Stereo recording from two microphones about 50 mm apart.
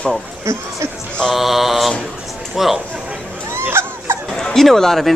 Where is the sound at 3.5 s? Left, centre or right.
Right.